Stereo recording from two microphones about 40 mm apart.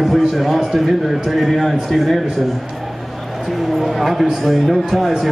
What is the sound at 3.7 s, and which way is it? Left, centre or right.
Speech, centre.